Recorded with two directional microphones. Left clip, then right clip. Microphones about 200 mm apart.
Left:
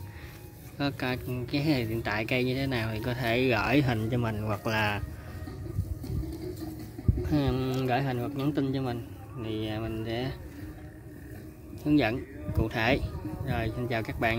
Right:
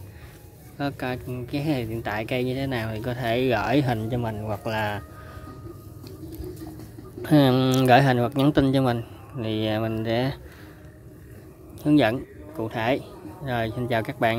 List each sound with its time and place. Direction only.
0.7 s speech: 5° right (ahead or behind)
7.2 s a man's voice: 35° right (ahead or behind)
11.8 s speech: 20° right (ahead or behind)
12.6 s speech: 10° right (ahead or behind)
13.5 s speech: 25° right (ahead or behind)